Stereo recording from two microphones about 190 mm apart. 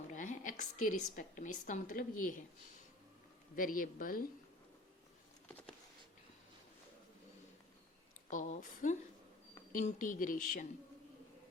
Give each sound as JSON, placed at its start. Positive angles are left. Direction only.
{"t": 0.1, "sound": "a sound", "side_deg": 40}
{"t": 1.1, "sound": "speech", "side_deg": 45}
{"t": 3.5, "sound": "speech", "side_deg": 45}
{"t": 8.3, "sound": "speech", "side_deg": 40}